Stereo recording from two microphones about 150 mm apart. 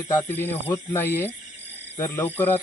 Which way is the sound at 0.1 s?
15° left (ahead or behind).